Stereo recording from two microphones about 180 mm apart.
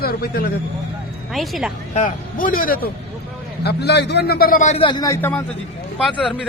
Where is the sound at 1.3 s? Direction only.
Centre (ahead or behind).